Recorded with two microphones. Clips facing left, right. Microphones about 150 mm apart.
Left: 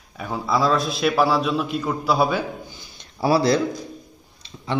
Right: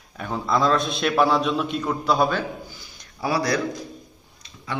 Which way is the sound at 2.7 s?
25° left (ahead or behind).